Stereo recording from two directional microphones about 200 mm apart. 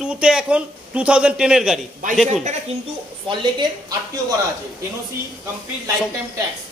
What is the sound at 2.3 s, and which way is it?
Speech, 35° right (ahead or behind).